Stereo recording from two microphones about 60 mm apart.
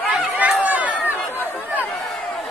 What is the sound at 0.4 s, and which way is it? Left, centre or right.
Run, right.